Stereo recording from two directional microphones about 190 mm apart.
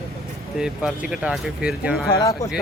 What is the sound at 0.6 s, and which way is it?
Speech, 5° right (ahead or behind).